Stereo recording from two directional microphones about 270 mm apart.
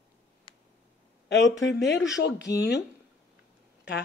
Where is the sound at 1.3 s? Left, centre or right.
Left.